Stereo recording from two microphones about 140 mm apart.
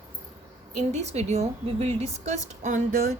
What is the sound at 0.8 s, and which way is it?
A woman's voice, 55° right (ahead or behind).